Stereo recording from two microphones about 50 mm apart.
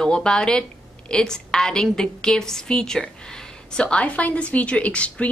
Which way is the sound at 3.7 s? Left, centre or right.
Left.